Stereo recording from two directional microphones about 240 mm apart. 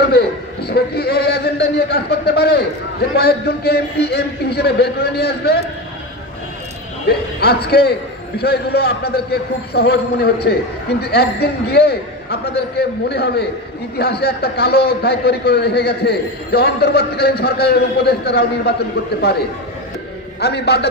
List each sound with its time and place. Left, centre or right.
0.7 s a man's voice: left
7.1 s a man's voice: left
20.3 s a man's voice: left